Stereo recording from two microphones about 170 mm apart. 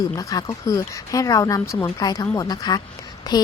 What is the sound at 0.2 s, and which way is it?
Speech, 20° left (ahead or behind).